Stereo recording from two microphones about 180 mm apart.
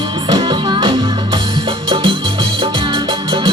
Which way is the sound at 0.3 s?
25° right (ahead or behind).